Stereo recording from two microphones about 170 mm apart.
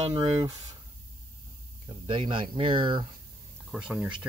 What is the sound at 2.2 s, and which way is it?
Speech, 35° right (ahead or behind).